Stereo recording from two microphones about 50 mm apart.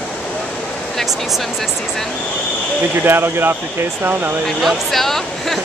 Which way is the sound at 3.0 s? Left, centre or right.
Right.